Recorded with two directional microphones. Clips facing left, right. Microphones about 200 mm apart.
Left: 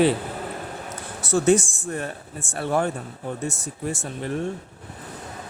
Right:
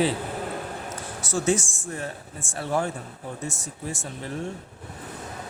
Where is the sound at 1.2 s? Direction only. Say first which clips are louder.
Left 6 dB; 60° left (ahead or behind).